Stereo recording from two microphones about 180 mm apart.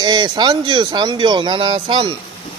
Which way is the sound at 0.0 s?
25° right (ahead or behind).